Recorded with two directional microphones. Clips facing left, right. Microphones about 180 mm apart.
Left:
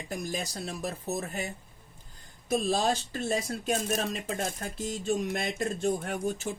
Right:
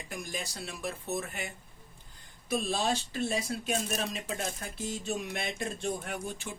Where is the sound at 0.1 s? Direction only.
40° left (ahead or behind).